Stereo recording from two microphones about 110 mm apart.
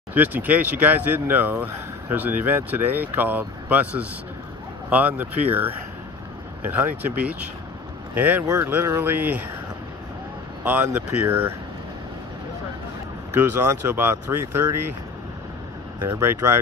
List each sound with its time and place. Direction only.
0.1 s speech: 15° right (ahead or behind)
10.6 s speech: 15° right (ahead or behind)
13.4 s speech: 20° right (ahead or behind)
16.0 s speech: 20° right (ahead or behind)